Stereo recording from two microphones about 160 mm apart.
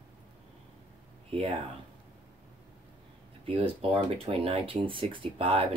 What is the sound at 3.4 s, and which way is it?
Speech, 35° right (ahead or behind).